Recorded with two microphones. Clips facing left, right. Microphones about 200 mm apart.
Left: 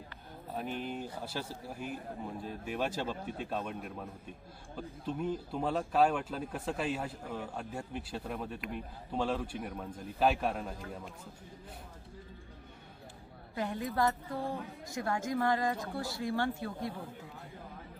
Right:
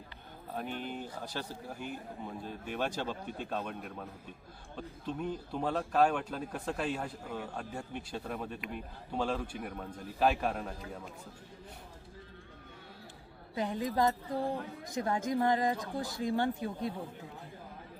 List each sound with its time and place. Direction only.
0.5 s speech: 5° left (ahead or behind)
13.6 s speech: 15° right (ahead or behind)